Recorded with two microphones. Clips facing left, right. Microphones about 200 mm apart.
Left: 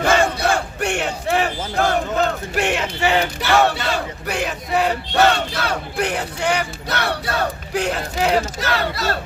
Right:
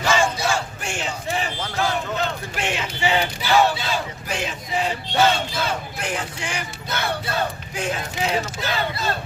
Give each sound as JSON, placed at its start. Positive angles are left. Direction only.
{"t": 0.0, "sound": "battle cry", "side_deg": 60}
{"t": 2.6, "sound": "speech", "side_deg": 60}